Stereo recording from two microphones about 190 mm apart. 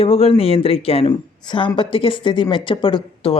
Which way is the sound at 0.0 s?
30° left (ahead or behind).